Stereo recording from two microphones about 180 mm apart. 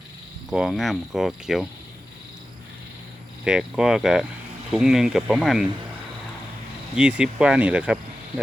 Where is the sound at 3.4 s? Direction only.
5° right (ahead or behind).